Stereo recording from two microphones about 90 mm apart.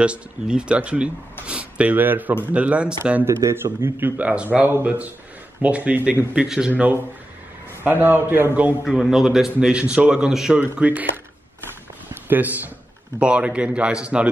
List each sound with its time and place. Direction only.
0.0 s a man's voice: 10° right (ahead or behind)
3.3 s a man's voice: 30° right (ahead or behind)
4.2 s a man's voice: 15° right (ahead or behind)
6.7 s a man's voice: 20° right (ahead or behind)
8.8 s a man's voice: 5° right (ahead or behind)